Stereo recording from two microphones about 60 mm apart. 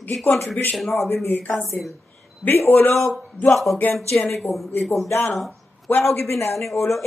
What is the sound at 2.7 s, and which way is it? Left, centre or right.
Speech, left.